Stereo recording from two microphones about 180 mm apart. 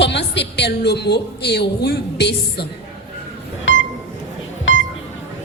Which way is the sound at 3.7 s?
90° left.